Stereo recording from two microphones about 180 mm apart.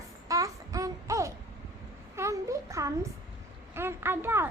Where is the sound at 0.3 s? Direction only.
20° right (ahead or behind).